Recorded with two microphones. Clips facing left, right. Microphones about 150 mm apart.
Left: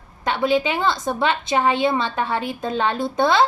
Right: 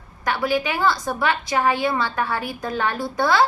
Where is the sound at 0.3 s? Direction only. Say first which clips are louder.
Left 3 dB; 25° left (ahead or behind).